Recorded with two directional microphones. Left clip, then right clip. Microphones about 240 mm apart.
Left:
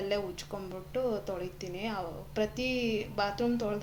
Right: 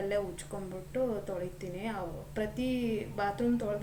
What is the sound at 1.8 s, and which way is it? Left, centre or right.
A woman's voice, left.